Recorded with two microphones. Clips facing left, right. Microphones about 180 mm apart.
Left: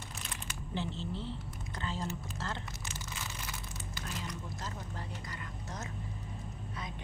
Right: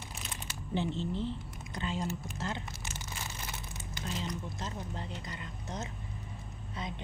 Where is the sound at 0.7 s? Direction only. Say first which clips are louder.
Right 5 dB; 15° right (ahead or behind).